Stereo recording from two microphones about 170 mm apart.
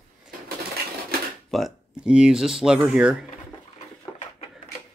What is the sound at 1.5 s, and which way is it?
Speech, centre (ahead or behind).